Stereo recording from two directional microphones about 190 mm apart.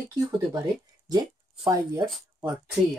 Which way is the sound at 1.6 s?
20° right (ahead or behind).